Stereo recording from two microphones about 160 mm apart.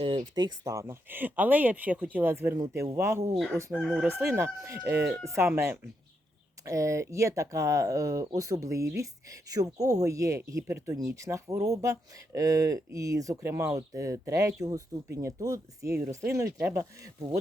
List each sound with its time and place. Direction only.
0.3 s speech: 25° right (ahead or behind)
3.3 s chicken: centre (ahead or behind)
4.2 s speech: 15° right (ahead or behind)